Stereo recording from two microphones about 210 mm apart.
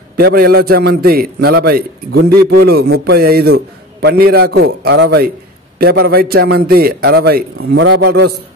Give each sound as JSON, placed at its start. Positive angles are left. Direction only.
{"t": 0.2, "sound": "a man's voice", "side_deg": -45}
{"t": 7.5, "sound": "a man's voice", "side_deg": -65}